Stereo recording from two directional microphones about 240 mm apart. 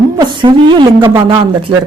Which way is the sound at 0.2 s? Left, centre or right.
Centre.